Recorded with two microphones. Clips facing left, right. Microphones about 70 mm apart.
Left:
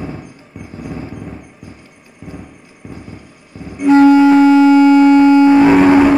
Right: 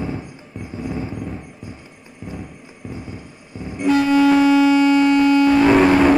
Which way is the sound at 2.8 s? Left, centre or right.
Centre.